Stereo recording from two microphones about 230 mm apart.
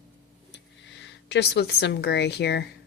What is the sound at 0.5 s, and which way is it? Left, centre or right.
Speech, left.